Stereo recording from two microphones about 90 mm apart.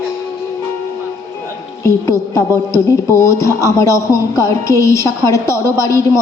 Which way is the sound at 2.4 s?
35° left (ahead or behind).